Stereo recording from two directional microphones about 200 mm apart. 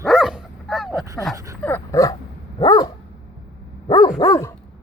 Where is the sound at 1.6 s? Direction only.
10° left (ahead or behind).